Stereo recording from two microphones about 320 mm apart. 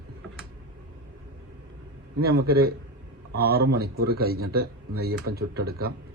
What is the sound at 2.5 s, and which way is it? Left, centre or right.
Speech, right.